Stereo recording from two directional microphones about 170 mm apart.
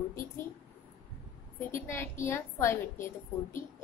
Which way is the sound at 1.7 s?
15° left (ahead or behind).